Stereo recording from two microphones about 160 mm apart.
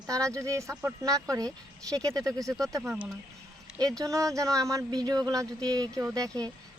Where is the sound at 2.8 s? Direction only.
5° right (ahead or behind).